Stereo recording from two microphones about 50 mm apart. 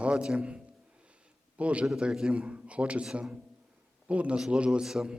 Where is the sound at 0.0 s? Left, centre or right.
Centre.